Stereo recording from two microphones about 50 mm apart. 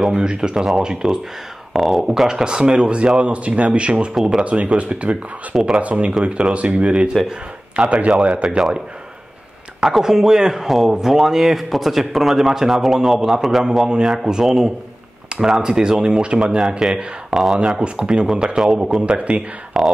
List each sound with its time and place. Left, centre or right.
0.1 s speech: centre
4.1 s speech: centre
4.5 s speech: right
9.8 s speech: centre
17.8 s speech: centre